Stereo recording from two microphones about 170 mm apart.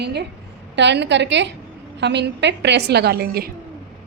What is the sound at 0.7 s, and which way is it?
A woman's voice, 90° right.